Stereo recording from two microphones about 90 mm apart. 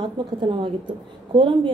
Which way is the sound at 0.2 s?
60° right (ahead or behind).